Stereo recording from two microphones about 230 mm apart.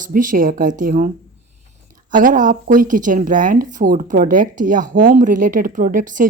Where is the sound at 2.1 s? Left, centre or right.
Right.